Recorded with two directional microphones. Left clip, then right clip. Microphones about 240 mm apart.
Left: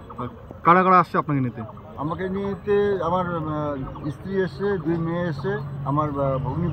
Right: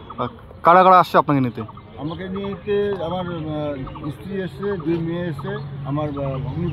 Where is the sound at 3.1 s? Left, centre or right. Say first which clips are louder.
Left 2 dB; centre.